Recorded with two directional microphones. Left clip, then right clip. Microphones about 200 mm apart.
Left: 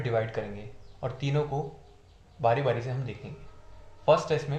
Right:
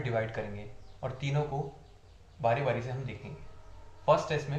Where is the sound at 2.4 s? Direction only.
50° left (ahead or behind).